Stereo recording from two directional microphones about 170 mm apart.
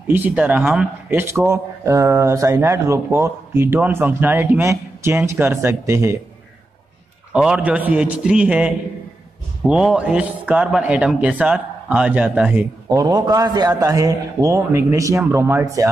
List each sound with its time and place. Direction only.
0.1 s a man's voice: 10° right (ahead or behind)
7.3 s a man's voice: 5° right (ahead or behind)
12.9 s a man's voice: 20° right (ahead or behind)